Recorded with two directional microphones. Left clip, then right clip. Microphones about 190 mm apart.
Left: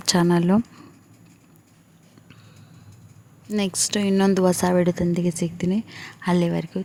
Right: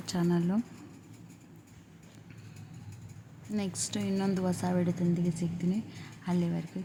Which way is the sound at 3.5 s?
45° left (ahead or behind).